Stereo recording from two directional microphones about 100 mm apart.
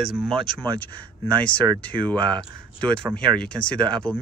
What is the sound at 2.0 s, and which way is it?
Speech, 15° left (ahead or behind).